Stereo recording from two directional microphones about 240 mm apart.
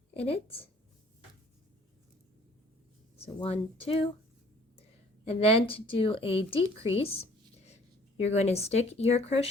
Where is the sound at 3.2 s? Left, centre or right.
Left.